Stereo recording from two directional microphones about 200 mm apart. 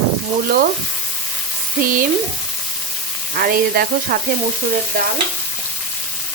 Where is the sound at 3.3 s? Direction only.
50° right (ahead or behind).